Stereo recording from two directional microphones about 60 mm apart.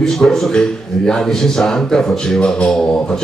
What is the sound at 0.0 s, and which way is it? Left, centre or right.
A man's voice, centre.